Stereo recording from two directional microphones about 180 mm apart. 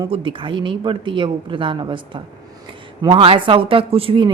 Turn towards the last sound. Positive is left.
turn(degrees=-30)  # may be behind; listen again after turning